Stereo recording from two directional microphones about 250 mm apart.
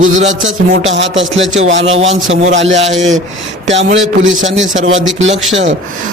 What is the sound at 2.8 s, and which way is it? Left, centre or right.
Speech, right.